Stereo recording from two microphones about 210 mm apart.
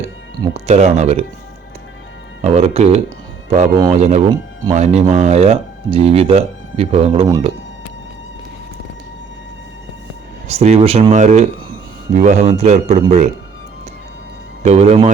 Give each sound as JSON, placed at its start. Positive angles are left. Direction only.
{"t": 0.4, "sound": "speech", "side_deg": -30}
{"t": 2.4, "sound": "speech", "side_deg": -30}
{"t": 10.5, "sound": "speech", "side_deg": -30}
{"t": 14.6, "sound": "speech", "side_deg": -30}